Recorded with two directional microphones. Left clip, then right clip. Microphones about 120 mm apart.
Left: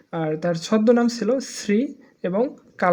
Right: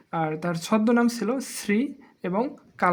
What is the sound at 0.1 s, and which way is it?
Speech, 25° left (ahead or behind).